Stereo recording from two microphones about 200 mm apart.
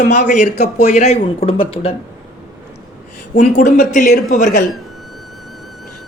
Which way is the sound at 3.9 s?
40° left (ahead or behind).